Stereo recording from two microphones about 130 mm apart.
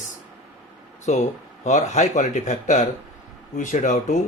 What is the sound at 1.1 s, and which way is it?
Speech, 60° left (ahead or behind).